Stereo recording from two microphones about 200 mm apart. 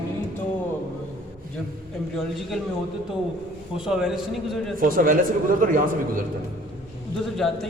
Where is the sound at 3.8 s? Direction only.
5° right (ahead or behind).